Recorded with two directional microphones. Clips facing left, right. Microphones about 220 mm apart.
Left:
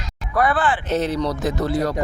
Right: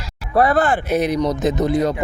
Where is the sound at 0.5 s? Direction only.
45° right (ahead or behind).